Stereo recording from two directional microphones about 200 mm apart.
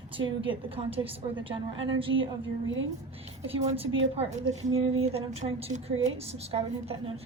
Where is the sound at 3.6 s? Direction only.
30° right (ahead or behind).